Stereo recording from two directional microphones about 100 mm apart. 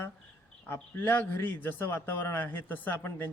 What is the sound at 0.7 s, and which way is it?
A man's voice, 25° left (ahead or behind).